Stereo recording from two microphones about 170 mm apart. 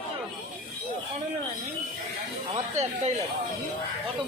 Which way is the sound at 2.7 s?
40° right (ahead or behind).